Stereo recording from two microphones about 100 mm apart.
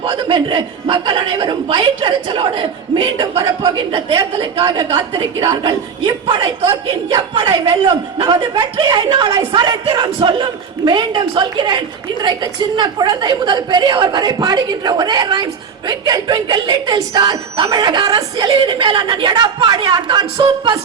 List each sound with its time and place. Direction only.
0.0 s a man's voice: 60° right (ahead or behind); by 5.5 s 45° right (ahead or behind)
6.0 s a man's voice: 60° right (ahead or behind)